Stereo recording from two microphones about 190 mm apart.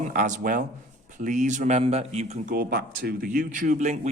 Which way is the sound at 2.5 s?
50° right (ahead or behind).